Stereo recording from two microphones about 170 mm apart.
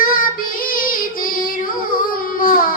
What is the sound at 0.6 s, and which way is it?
Singing, 55° left (ahead or behind).